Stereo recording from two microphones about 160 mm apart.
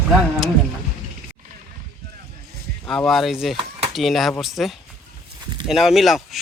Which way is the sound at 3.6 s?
35° right (ahead or behind).